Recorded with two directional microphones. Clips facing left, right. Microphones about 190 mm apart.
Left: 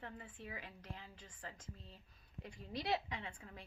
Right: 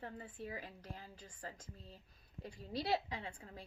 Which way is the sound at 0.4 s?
35° right (ahead or behind).